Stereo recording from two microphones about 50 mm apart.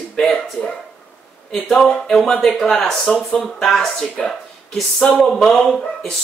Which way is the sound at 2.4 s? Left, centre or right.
Centre.